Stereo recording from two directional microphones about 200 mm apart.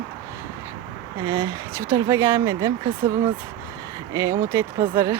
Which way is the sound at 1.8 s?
15° right (ahead or behind).